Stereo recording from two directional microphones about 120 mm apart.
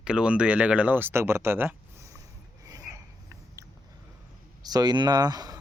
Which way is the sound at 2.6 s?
30° right (ahead or behind).